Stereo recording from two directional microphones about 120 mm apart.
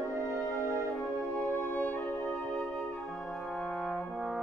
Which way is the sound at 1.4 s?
20° left (ahead or behind).